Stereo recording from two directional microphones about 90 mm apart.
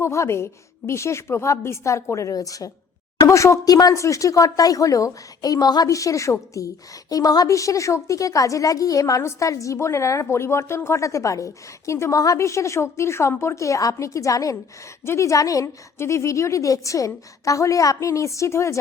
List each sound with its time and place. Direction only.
0.0 s a woman's voice: 30° left (ahead or behind)